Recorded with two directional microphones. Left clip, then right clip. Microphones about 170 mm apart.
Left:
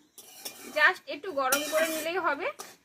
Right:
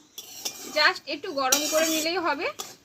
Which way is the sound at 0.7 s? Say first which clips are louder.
Right 2 dB; 15° right (ahead or behind).